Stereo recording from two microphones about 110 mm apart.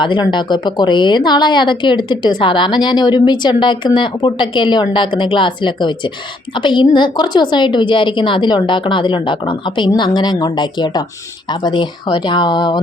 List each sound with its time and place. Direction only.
0.0 s speech: 45° left (ahead or behind)